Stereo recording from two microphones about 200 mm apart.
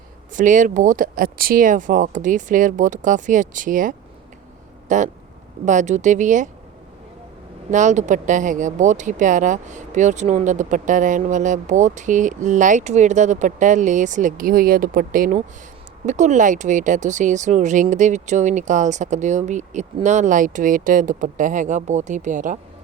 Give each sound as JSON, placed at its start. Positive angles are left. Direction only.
{"t": 0.3, "sound": "speech", "side_deg": -40}
{"t": 7.7, "sound": "speech", "side_deg": -35}